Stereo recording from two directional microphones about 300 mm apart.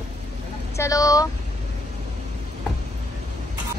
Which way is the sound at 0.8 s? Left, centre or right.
Centre.